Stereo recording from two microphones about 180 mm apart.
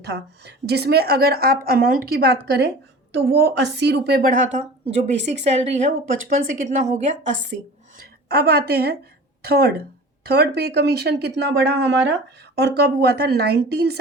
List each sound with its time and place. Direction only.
0.0 s a woman's voice: 70° right (ahead or behind)
5.2 s a woman's voice: 40° right (ahead or behind)
7.9 s a woman's voice: 60° right (ahead or behind)
12.5 s a woman's voice: 65° right (ahead or behind)